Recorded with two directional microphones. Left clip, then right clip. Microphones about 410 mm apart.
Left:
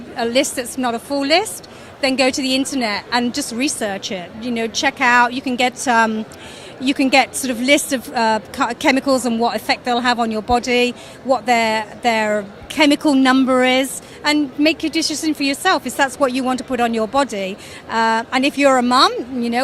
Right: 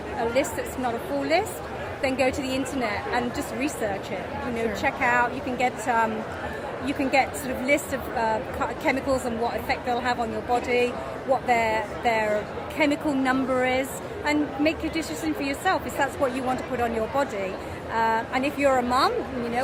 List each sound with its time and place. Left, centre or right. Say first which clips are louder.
0.2 s speech: left 7 dB; left